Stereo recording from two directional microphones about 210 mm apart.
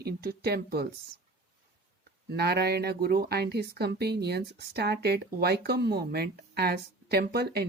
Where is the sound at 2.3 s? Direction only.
50° right (ahead or behind).